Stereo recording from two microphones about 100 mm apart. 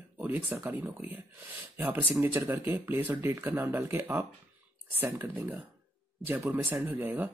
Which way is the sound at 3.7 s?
30° right (ahead or behind).